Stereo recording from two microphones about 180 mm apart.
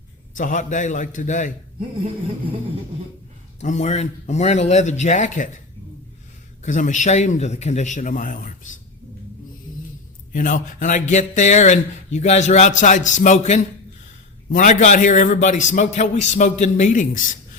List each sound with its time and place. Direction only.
0.3 s a man's voice: 45° left (ahead or behind)
3.6 s a man's voice: 40° left (ahead or behind)
6.6 s a man's voice: 45° left (ahead or behind)
10.3 s a man's voice: 50° left (ahead or behind)